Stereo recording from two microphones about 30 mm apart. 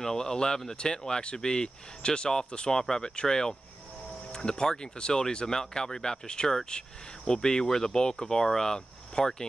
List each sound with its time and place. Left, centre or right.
0.0 s speech: left